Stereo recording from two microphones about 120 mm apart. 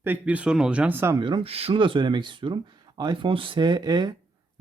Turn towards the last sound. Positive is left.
turn(degrees=-35)  # may be behind; listen again after turning